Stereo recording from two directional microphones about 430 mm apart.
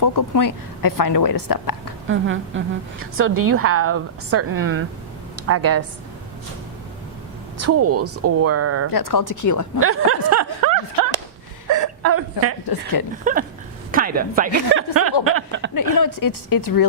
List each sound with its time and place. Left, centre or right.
0.0 s a woman's voice: left
2.0 s a woman's voice: right
7.6 s a woman's voice: right
8.9 s a woman's voice: left
9.8 s speech: right
10.2 s a sound: right
11.7 s hiccup: right
12.6 s a woman's voice: left
13.3 s a sound: centre
13.9 s speech: centre
15.7 s a woman's voice: left